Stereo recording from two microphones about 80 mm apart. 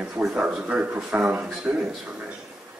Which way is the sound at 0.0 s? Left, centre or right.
Centre.